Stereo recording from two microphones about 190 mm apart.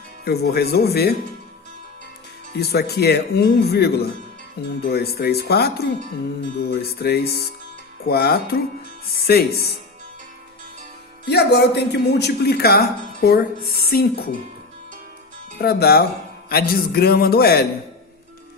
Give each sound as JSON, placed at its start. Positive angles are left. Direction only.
{"t": 0.3, "sound": "a man's voice", "side_deg": 55}
{"t": 2.6, "sound": "a man's voice", "side_deg": 55}
{"t": 7.0, "sound": "a man's voice", "side_deg": 55}
{"t": 11.3, "sound": "a man's voice", "side_deg": 60}
{"t": 15.6, "sound": "a man's voice", "side_deg": 55}